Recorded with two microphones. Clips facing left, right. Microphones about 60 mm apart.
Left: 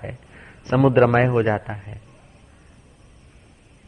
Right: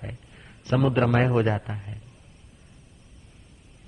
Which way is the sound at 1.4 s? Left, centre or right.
Left.